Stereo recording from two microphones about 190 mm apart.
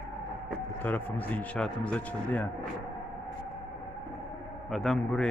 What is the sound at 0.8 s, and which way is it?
A man's voice, 10° left (ahead or behind).